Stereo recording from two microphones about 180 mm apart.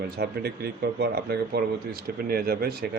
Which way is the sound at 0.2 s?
60° right (ahead or behind).